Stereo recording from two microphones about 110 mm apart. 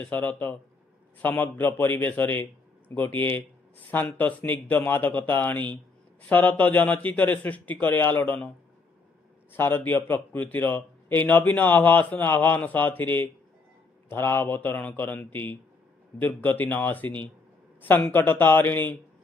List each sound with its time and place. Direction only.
0.0 s speech: 15° left (ahead or behind)
9.5 s speech: 20° left (ahead or behind)